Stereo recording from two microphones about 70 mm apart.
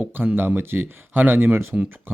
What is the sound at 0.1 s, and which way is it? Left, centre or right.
Speech, right.